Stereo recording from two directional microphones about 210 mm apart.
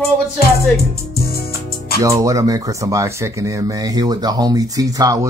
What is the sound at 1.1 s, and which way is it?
Music, 45° left (ahead or behind).